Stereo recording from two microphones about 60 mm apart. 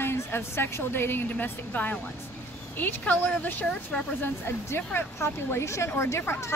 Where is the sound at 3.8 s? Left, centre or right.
Left.